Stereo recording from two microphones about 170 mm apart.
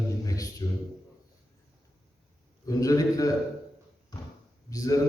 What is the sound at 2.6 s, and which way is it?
Speech, 20° left (ahead or behind).